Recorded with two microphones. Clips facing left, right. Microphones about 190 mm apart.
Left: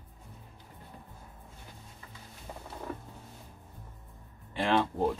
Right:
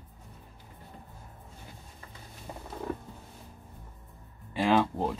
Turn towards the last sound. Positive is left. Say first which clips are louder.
# right 2 dB
turn(degrees=-5)  # may be behind; listen again after turning